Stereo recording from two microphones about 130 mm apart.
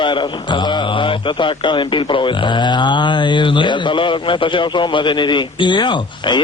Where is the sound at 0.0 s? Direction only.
35° left (ahead or behind).